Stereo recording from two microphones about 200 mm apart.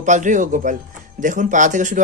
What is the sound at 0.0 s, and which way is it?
Speech, 40° right (ahead or behind).